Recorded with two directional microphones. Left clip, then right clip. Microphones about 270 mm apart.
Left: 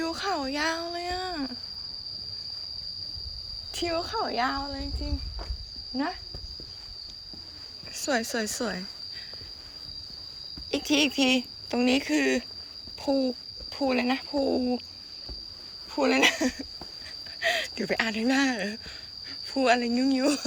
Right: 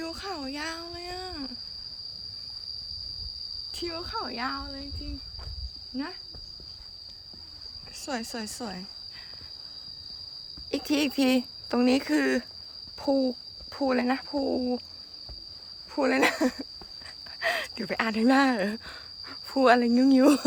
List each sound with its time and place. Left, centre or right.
0.0 s a sound: centre
3.8 s speech: centre
6.0 s speech: centre
8.0 s speech: centre
10.7 s speech: centre
16.0 s speech: centre